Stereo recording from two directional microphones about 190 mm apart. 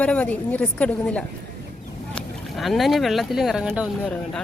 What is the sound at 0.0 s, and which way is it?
A woman's voice, 5° left (ahead or behind).